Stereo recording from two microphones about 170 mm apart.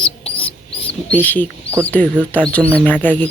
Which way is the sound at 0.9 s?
10° left (ahead or behind).